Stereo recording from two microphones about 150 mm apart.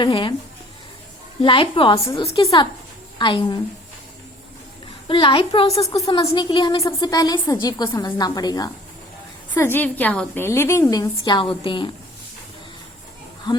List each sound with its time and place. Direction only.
0.0 s a woman's voice: 35° left (ahead or behind)
1.4 s a woman's voice: 35° left (ahead or behind)
5.0 s a woman's voice: 35° left (ahead or behind)
9.6 s a woman's voice: 15° left (ahead or behind); by 11.9 s 35° left (ahead or behind)